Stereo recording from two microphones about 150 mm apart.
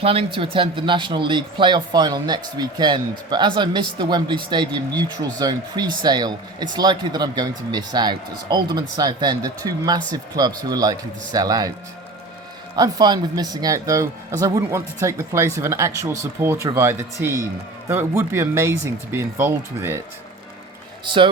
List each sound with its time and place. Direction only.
0.0 s speech: 40° right (ahead or behind)
12.7 s speech: 25° right (ahead or behind)
21.0 s speech: 30° right (ahead or behind)